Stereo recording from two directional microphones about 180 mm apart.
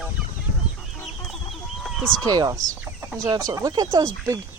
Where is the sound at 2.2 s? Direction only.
20° right (ahead or behind).